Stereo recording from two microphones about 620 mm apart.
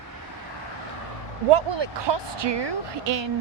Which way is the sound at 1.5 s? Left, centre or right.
Right.